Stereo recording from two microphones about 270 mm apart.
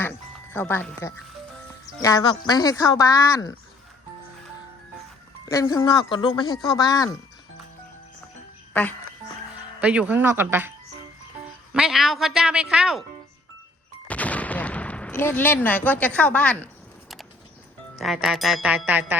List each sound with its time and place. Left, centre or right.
0.0 s speech: centre
5.5 s speech: centre
8.7 s speech: centre
9.8 s speech: centre
11.7 s speech: centre
14.1 s gunshot: centre
17.9 s speech: centre